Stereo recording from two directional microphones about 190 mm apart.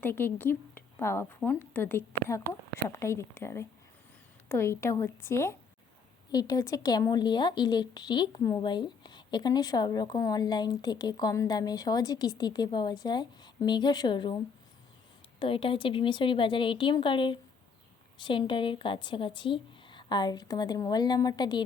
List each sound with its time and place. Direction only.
0.0 s a woman's voice: 10° left (ahead or behind)
15.4 s a woman's voice: 30° left (ahead or behind)